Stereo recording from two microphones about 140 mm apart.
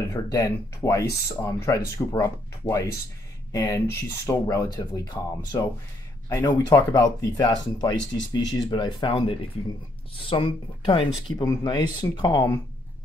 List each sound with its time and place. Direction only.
0.1 s speech: 20° left (ahead or behind)